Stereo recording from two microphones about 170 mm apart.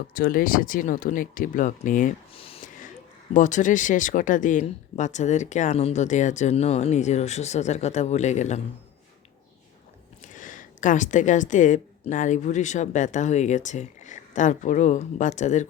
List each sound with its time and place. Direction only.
0.1 s speech: 60° left (ahead or behind)
2.3 s speech: 35° left (ahead or behind)
3.3 s speech: 45° left (ahead or behind)
10.2 s a woman's voice: 50° left (ahead or behind)